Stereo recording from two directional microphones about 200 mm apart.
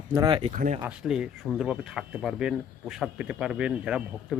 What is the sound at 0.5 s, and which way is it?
Speech, 40° right (ahead or behind).